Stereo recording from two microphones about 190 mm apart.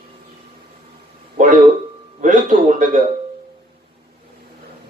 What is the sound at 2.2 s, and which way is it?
Speech, 40° right (ahead or behind).